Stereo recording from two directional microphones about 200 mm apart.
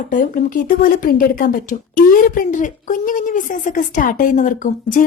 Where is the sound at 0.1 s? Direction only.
40° left (ahead or behind).